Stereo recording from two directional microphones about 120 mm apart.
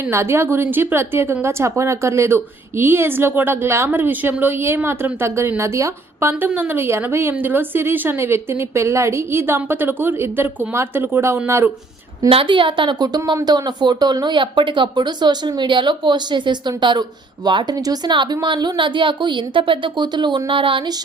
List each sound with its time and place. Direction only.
0.0 s a woman's voice: 20° right (ahead or behind)
12.3 s a woman's voice: 50° right (ahead or behind)